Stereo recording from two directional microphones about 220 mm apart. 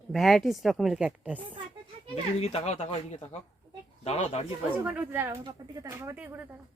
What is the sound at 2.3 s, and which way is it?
Speech, 30° left (ahead or behind).